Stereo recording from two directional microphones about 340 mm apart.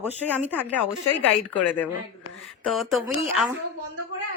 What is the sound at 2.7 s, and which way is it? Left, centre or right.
Speech, centre.